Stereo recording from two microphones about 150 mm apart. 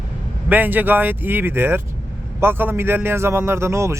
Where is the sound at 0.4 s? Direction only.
10° right (ahead or behind).